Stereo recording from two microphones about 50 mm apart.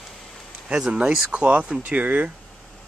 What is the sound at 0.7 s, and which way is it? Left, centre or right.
Speech, centre.